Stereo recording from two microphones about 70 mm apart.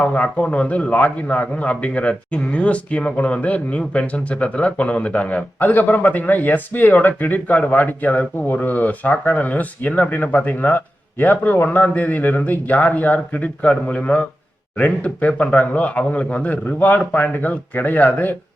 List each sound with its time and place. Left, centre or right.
0.0 s a man's voice: centre